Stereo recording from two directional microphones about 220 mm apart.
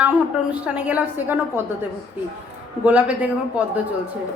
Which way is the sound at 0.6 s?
5° right (ahead or behind).